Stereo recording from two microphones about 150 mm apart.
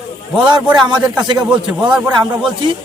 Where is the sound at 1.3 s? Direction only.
30° right (ahead or behind).